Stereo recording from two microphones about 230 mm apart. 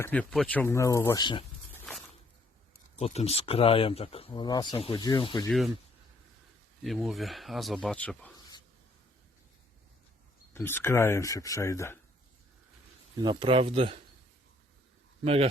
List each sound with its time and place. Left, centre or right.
0.0 s speech: centre
3.0 s speech: left
5.5 s speech: centre
6.8 s speech: centre
10.5 s speech: centre
13.2 s speech: right
15.2 s speech: right